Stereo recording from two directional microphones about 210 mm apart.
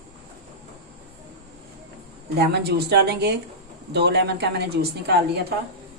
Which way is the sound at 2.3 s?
50° right (ahead or behind).